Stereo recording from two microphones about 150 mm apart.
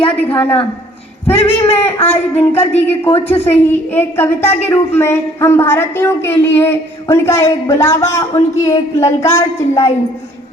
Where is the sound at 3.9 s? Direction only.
15° left (ahead or behind).